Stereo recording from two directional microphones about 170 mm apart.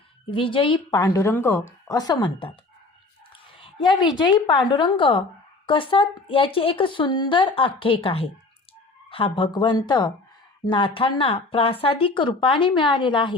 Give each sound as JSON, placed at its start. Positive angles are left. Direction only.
{"t": 0.3, "sound": "speech", "side_deg": 30}
{"t": 3.6, "sound": "speech", "side_deg": 30}